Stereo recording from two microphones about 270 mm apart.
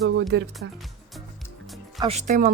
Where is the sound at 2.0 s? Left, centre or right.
Right.